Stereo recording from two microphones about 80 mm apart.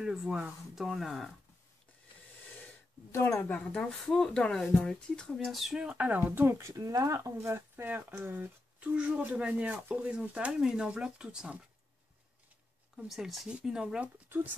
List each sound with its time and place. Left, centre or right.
0.0 s speech: centre
3.1 s speech: left
3.4 s speech: centre
4.0 s speech: centre
5.4 s speech: centre; by 6.7 s right
6.7 s speech: right; by 11.5 s centre
12.9 s speech: centre